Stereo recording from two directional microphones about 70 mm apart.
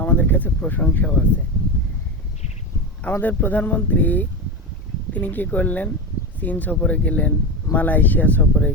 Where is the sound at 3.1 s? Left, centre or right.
Left.